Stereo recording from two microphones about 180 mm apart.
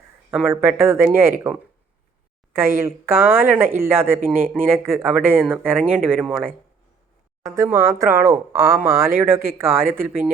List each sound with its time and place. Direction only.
0.3 s speech: 10° right (ahead or behind)
2.5 s speech: 15° right (ahead or behind)